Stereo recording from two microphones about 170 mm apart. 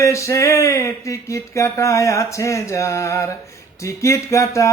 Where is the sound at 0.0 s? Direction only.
15° left (ahead or behind).